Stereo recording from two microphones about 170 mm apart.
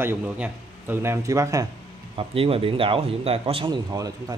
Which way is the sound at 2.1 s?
35° right (ahead or behind).